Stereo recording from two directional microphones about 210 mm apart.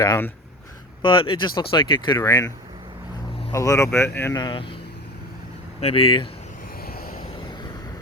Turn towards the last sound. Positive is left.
turn(degrees=45)  # may be behind; listen again after turning